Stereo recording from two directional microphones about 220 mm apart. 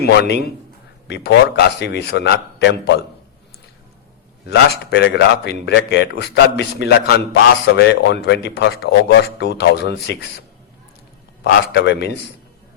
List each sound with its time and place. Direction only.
0.0 s speech: 50° left (ahead or behind)
4.4 s speech: 45° left (ahead or behind)
11.4 s speech: 50° left (ahead or behind)